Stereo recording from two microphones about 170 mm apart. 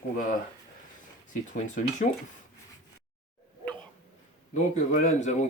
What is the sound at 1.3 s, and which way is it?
Speech, 50° left (ahead or behind).